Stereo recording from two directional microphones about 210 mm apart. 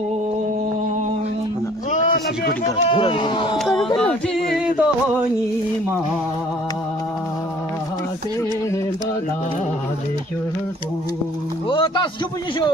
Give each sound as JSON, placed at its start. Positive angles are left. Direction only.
{"t": 1.9, "sound": "a sound", "side_deg": 40}
{"t": 2.6, "sound": "speech", "side_deg": 25}
{"t": 4.6, "sound": "music", "side_deg": -5}
{"t": 11.7, "sound": "speech", "side_deg": 20}